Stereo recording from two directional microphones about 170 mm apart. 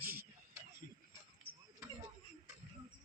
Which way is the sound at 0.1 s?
15° right (ahead or behind).